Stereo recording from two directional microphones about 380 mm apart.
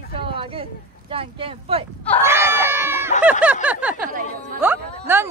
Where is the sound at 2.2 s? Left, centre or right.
Centre.